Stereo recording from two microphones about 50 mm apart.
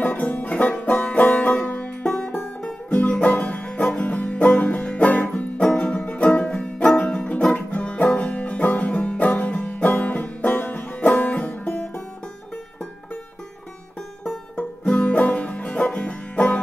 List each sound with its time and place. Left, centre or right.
0.0 s music: left
3.0 s music: left
14.6 s music: left